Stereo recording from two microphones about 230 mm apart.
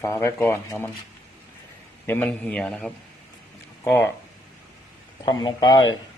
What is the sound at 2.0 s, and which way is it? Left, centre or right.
Speech, centre.